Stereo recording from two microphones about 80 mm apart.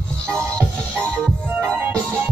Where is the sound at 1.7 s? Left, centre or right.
Right.